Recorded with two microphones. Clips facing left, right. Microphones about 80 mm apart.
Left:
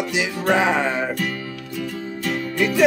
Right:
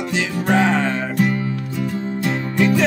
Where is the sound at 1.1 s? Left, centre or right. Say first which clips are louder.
Right 7 dB; right.